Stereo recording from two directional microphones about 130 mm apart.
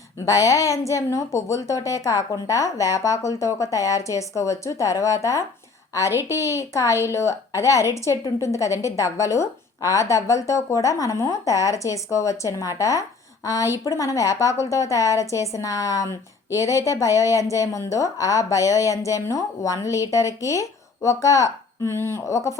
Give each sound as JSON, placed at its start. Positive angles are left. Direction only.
{"t": 0.3, "sound": "a woman's voice", "side_deg": 25}